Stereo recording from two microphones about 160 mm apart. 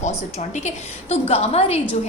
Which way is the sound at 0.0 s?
45° left (ahead or behind).